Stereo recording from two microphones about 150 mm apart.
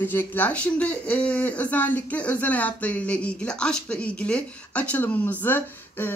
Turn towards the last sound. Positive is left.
turn(degrees=15)  # may be behind; listen again after turning